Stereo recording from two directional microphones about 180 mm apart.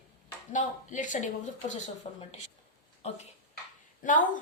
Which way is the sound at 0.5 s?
45° left (ahead or behind).